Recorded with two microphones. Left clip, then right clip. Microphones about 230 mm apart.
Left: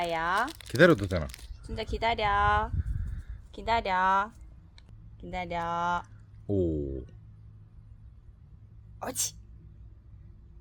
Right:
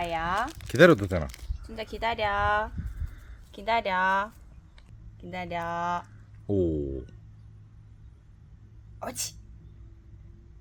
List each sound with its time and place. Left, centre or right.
0.0 s biting: left
0.4 s speech: left
0.8 s speech: centre
1.3 s speech: left
6.5 s speech: centre
9.0 s speech: left